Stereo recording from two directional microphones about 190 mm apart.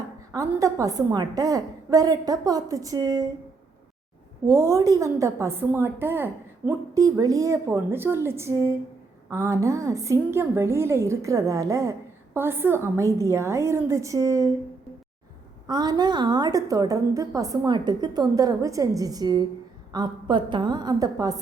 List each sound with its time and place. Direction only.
0.3 s a woman's voice: 15° right (ahead or behind)
4.4 s a woman's voice: 15° right (ahead or behind)
15.6 s a woman's voice: 20° right (ahead or behind)